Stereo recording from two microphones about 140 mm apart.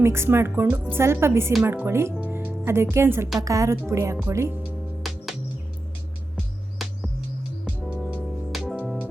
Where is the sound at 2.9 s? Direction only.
20° right (ahead or behind).